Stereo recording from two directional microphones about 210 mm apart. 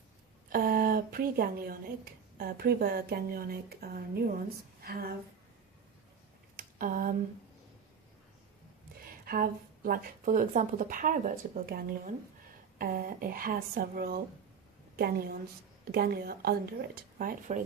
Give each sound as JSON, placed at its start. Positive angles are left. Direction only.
{"t": 0.5, "sound": "a woman's voice", "side_deg": -45}
{"t": 6.6, "sound": "a sound", "side_deg": -40}
{"t": 9.0, "sound": "a woman's voice", "side_deg": -45}